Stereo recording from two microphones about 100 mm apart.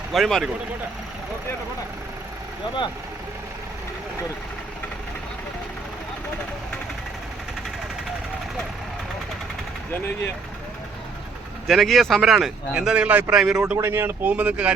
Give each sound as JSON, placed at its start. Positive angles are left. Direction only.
{"t": 0.1, "sound": "speech", "side_deg": 5}
{"t": 11.7, "sound": "speech", "side_deg": 0}
{"t": 13.3, "sound": "speech", "side_deg": -5}
{"t": 13.7, "sound": "speech", "side_deg": -25}